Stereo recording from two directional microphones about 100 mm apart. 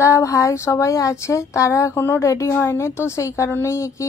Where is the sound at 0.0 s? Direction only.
30° left (ahead or behind).